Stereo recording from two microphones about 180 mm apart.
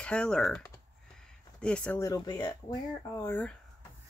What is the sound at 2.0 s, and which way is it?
Speech, 20° left (ahead or behind).